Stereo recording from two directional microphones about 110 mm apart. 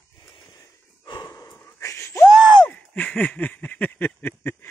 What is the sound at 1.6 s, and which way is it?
Wheeze, 25° left (ahead or behind).